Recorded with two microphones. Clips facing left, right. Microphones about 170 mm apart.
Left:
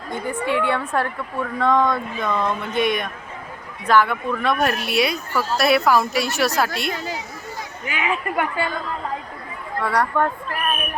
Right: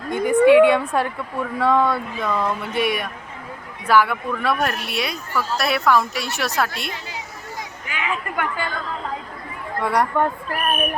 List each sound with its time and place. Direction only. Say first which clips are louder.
0.1 s a woman's voice: right 10 dB; 15° right (ahead or behind); by 6.9 s centre (ahead or behind)
7.9 s a woman's voice: left 3 dB; 15° left (ahead or behind)
9.8 s a woman's voice: right 1 dB; 15° right (ahead or behind)